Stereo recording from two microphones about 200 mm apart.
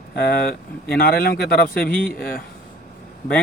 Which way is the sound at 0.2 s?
50° left (ahead or behind).